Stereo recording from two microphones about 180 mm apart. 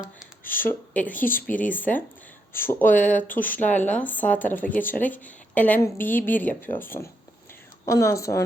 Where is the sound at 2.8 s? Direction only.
45° left (ahead or behind).